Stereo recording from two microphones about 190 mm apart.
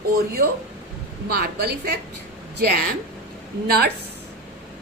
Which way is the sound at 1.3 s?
55° right (ahead or behind).